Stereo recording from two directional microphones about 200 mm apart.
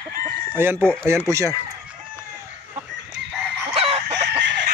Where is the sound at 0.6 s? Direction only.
10° right (ahead or behind).